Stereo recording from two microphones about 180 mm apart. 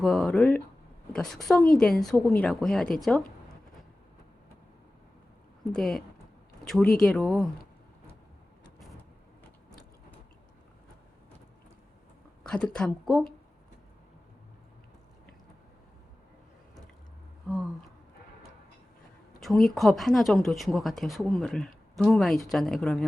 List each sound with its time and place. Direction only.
0.0 s speech: centre (ahead or behind)
5.7 s speech: centre (ahead or behind)
12.4 s speech: 5° left (ahead or behind)
17.5 s speech: centre (ahead or behind)
19.4 s speech: centre (ahead or behind)